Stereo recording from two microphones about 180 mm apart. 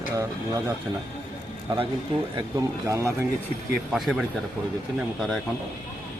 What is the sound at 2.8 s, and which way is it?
Speech, 15° right (ahead or behind).